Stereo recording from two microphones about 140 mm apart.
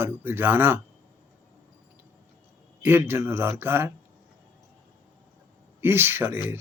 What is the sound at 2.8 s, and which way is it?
Speech, 15° right (ahead or behind).